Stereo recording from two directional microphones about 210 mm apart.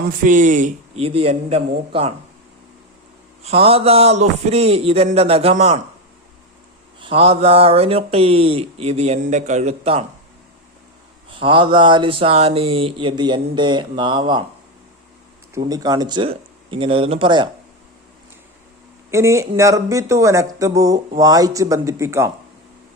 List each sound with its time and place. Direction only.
0.2 s a man's voice: 40° right (ahead or behind)
3.4 s speech: 30° right (ahead or behind)
7.0 s speech: 25° right (ahead or behind)
11.3 s speech: 25° right (ahead or behind)
15.5 s speech: 15° right (ahead or behind)
19.1 s speech: 15° right (ahead or behind)